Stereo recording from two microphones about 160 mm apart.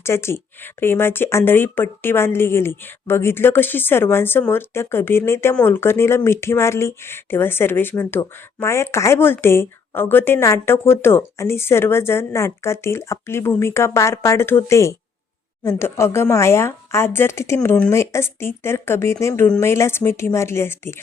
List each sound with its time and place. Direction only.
0.0 s speech: 15° left (ahead or behind)